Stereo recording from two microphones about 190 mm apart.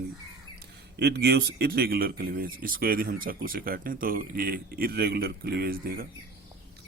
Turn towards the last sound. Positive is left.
turn(degrees=-50)  # may be behind; listen again after turning